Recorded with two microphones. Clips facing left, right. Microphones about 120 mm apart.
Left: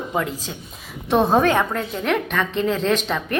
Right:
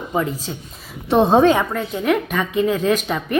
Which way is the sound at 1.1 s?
20° right (ahead or behind).